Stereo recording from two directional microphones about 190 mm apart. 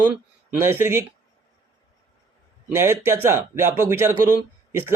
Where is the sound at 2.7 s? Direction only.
15° right (ahead or behind).